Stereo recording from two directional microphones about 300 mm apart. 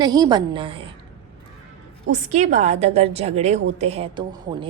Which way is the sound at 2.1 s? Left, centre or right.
Right.